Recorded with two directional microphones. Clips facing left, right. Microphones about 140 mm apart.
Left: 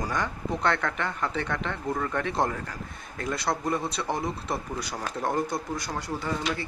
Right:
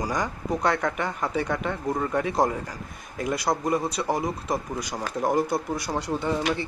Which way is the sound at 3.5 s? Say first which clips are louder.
Right 3 dB; 15° right (ahead or behind).